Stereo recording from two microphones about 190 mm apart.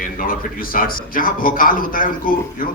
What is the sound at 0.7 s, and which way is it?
A man's voice, 45° left (ahead or behind).